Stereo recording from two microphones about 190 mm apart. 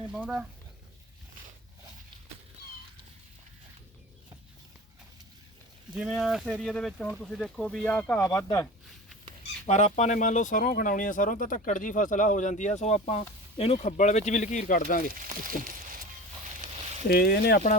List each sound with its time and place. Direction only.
0.1 s speech: 5° right (ahead or behind)
5.9 s speech: 5° right (ahead or behind); by 8.6 s 15° left (ahead or behind)
9.4 s speech: 40° left (ahead or behind)
16.6 s a sound: 40° right (ahead or behind)
17.1 s speech: 55° left (ahead or behind)